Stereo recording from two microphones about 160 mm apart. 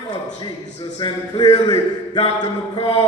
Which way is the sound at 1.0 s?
35° left (ahead or behind).